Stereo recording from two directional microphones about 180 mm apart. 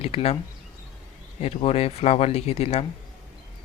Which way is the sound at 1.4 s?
35° left (ahead or behind).